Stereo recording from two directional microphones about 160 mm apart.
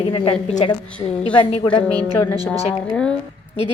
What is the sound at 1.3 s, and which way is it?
Speech, 30° left (ahead or behind).